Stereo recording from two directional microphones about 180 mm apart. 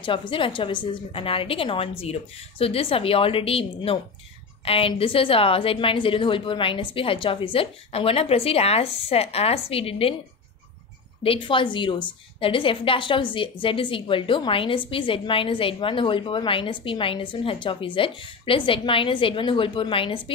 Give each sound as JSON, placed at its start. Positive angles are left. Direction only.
{"t": 0.0, "sound": "a woman's voice", "side_deg": 25}
{"t": 11.2, "sound": "a woman's voice", "side_deg": 30}